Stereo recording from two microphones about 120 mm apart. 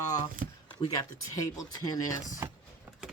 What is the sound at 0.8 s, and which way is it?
Speech, 30° left (ahead or behind).